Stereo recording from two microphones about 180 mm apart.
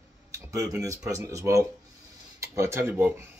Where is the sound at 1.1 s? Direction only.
15° right (ahead or behind).